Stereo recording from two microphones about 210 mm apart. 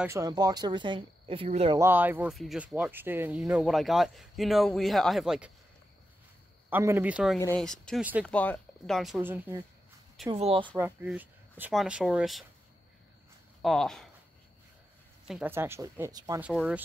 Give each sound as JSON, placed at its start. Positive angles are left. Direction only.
{"t": 0.0, "sound": "speech", "side_deg": -15}
{"t": 1.8, "sound": "speech", "side_deg": -10}
{"t": 6.7, "sound": "speech", "side_deg": -10}
{"t": 7.3, "sound": "speech", "side_deg": 10}
{"t": 8.3, "sound": "speech", "side_deg": 5}
{"t": 10.3, "sound": "speech", "side_deg": -25}
{"t": 10.8, "sound": "speech", "side_deg": -10}
{"t": 13.6, "sound": "speech", "side_deg": 0}
{"t": 15.2, "sound": "speech", "side_deg": -5}
{"t": 16.3, "sound": "speech", "side_deg": -5}